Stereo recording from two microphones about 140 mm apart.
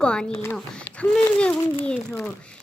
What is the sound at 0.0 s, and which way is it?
Speech, 5° left (ahead or behind).